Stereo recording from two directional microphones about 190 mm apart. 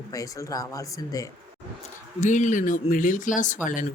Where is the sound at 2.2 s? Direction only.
40° left (ahead or behind).